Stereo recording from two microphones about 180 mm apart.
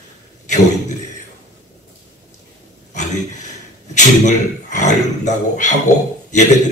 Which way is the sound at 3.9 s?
40° left (ahead or behind).